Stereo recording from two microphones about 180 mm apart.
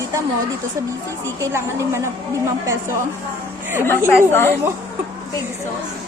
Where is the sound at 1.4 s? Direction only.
15° right (ahead or behind).